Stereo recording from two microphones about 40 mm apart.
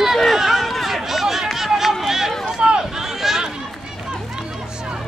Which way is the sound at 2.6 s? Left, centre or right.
Right.